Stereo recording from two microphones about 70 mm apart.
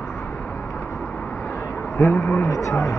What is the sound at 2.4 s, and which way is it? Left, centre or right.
Speech, left.